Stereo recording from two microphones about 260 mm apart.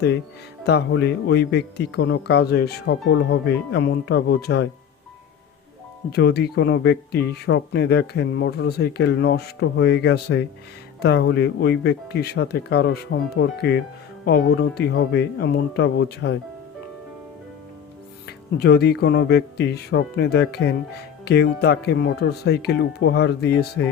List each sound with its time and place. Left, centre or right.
0.6 s speech: left
6.1 s speech: left
18.3 s speech: left